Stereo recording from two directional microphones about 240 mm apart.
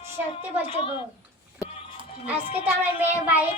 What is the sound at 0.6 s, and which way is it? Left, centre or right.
Speech, left.